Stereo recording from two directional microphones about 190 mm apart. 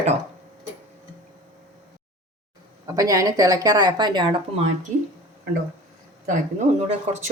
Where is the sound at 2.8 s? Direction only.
20° right (ahead or behind).